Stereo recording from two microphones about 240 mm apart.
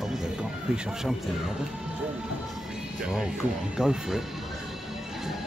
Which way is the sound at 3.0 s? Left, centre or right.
Centre.